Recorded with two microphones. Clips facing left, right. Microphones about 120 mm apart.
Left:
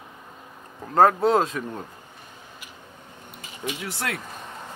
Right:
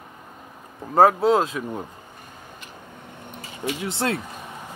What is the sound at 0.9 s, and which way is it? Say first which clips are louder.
Speech: right 1 dB; 5° right (ahead or behind).